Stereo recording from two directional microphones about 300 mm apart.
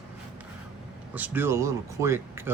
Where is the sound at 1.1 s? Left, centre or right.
Centre.